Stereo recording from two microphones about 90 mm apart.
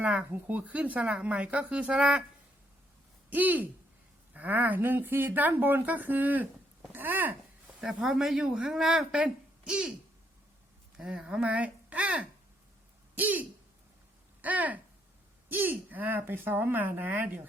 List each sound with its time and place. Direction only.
0.0 s speech: 15° right (ahead or behind)
3.2 s speech: 20° right (ahead or behind)
7.8 s speech: 5° right (ahead or behind)
10.9 s speech: 10° right (ahead or behind)